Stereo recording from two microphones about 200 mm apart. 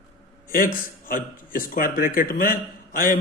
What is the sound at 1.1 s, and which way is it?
A man's voice, 45° left (ahead or behind).